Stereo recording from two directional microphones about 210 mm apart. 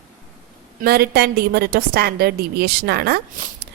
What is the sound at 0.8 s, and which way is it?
A woman's voice, 45° right (ahead or behind).